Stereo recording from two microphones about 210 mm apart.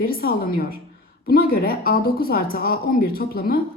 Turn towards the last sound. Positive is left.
turn(degrees=45)  # may be behind; listen again after turning